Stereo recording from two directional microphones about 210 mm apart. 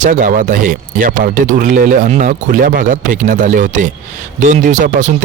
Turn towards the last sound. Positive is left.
turn(degrees=-35)  # may be behind; listen again after turning